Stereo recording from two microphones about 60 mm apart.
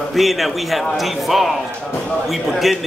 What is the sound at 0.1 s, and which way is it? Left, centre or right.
A man's voice, centre.